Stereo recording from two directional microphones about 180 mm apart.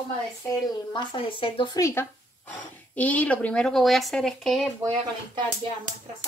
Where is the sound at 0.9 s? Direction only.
25° left (ahead or behind); by 4.7 s centre (ahead or behind).